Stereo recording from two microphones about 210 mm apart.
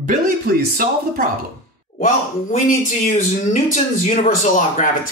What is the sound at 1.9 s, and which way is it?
Speech, 40° left (ahead or behind).